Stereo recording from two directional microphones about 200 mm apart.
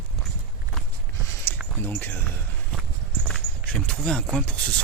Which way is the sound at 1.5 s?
10° left (ahead or behind).